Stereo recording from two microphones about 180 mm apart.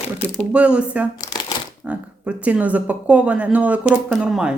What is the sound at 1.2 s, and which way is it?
Shuffling cards, 20° left (ahead or behind).